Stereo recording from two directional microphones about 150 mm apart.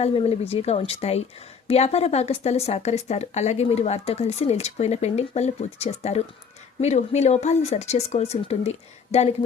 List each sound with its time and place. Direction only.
0.0 s speech: 40° left (ahead or behind)